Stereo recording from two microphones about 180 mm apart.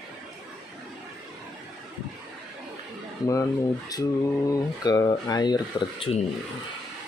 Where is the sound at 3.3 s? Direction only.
20° left (ahead or behind).